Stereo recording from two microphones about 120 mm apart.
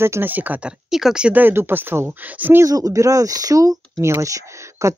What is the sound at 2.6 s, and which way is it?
Speech, 30° right (ahead or behind).